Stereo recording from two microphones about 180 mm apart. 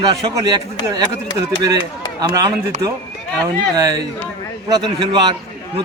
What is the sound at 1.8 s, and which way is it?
Chop, 20° left (ahead or behind).